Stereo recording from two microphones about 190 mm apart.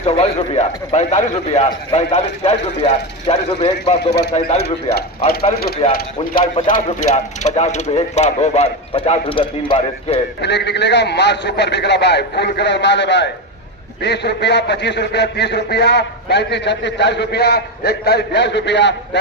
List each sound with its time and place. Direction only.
0.0 s a man's voice: 35° left (ahead or behind)
4.6 s a man's voice: 55° left (ahead or behind)
6.5 s a man's voice: 40° left (ahead or behind)
10.4 s a man's voice: 65° left (ahead or behind)